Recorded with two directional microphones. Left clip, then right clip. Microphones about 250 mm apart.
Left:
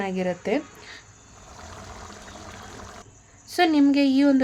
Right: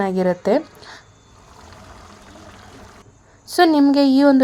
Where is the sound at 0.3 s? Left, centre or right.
Centre.